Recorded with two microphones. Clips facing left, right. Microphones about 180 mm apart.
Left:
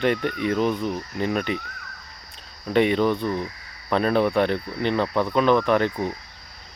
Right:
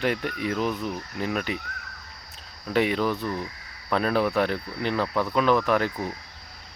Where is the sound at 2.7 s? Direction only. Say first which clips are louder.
Left 4 dB; 5° right (ahead or behind).